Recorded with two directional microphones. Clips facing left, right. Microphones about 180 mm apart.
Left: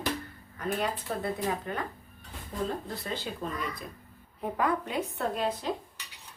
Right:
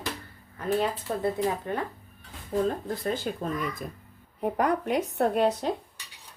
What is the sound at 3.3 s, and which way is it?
Speech, 50° right (ahead or behind).